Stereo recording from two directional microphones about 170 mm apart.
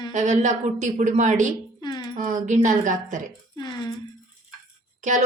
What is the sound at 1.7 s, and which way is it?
Music, 25° left (ahead or behind).